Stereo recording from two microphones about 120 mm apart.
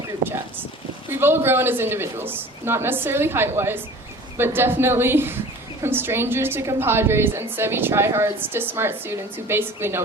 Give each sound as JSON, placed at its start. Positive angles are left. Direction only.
{"t": 1.1, "sound": "a woman's voice", "side_deg": -20}